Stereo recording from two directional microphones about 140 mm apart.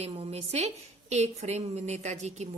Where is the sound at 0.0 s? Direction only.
45° right (ahead or behind).